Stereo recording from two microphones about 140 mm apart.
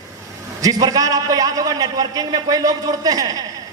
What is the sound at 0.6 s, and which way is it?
Speech, 25° right (ahead or behind).